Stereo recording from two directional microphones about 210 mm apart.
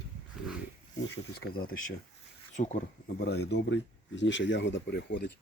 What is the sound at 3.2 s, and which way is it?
Speech, 50° left (ahead or behind).